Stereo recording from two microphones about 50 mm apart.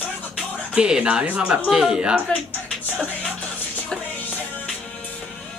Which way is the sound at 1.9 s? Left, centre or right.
Right.